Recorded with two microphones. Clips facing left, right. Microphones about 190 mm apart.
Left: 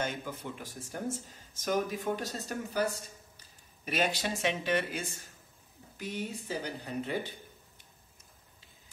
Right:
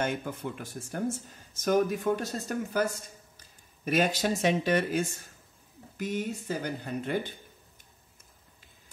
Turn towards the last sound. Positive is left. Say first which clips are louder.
# right 3 dB
turn(degrees=-55)  # may be behind; listen again after turning